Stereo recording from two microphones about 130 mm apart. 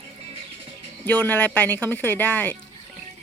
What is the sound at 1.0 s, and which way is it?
Speech, 10° left (ahead or behind).